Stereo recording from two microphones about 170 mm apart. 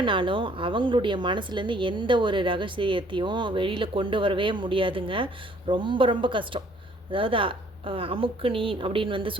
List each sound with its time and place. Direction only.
0.0 s speech: 30° right (ahead or behind)